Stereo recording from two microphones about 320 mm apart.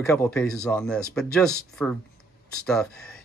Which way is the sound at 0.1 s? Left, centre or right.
Centre.